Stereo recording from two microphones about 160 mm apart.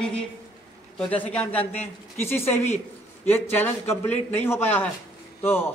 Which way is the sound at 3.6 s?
15° left (ahead or behind).